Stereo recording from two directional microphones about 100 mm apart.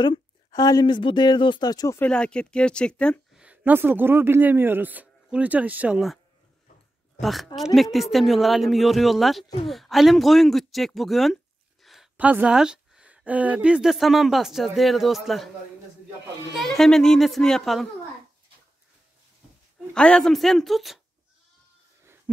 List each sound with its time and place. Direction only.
0.5 s speech: 40° left (ahead or behind)
2.0 s speech: 10° left (ahead or behind)
3.3 s a man's voice: 15° right (ahead or behind)
7.2 s speech: centre (ahead or behind)
11.8 s a sound: centre (ahead or behind)
12.2 s speech: 15° right (ahead or behind)
16.5 s speech: 5° left (ahead or behind)
19.9 s speech: 10° left (ahead or behind)